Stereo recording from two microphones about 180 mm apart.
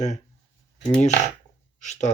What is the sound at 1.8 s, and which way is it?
Speech, 40° left (ahead or behind).